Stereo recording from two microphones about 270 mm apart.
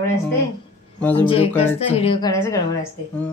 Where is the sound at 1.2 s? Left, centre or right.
Left.